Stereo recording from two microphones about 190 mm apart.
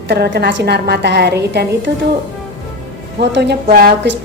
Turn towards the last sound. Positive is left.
turn(degrees=-50)  # may be behind; listen again after turning